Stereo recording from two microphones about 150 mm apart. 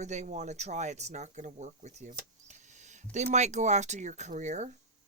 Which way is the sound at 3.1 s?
50° right (ahead or behind).